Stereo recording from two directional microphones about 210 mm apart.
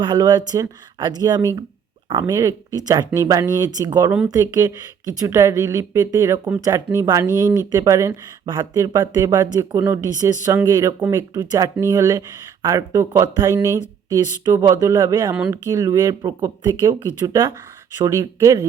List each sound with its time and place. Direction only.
0.0 s speech: 20° right (ahead or behind)